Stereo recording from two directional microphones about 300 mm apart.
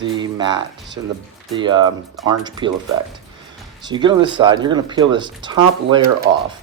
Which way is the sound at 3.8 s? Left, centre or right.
Centre.